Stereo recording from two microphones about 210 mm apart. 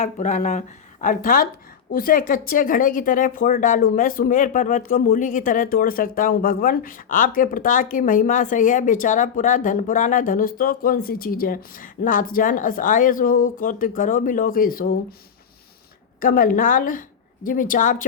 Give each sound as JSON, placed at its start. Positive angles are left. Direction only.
{"t": 0.0, "sound": "a woman's voice", "side_deg": 35}
{"t": 16.2, "sound": "a woman's voice", "side_deg": 40}